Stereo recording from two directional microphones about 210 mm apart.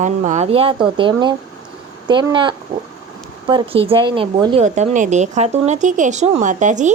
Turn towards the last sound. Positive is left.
turn(degrees=-35)  # may be behind; listen again after turning